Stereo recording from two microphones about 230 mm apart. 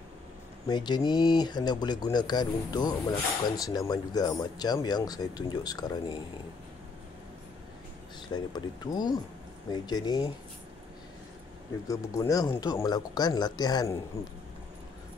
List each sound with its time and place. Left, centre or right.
0.7 s speech: centre
8.5 s speech: centre
11.9 s speech: centre